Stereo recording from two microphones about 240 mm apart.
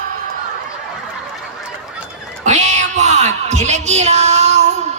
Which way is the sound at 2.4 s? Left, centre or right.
Right.